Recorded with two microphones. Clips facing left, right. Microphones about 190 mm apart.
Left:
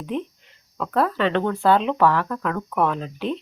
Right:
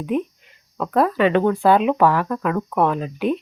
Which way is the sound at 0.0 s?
10° right (ahead or behind).